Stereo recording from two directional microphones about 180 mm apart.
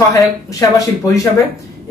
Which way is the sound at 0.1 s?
20° left (ahead or behind).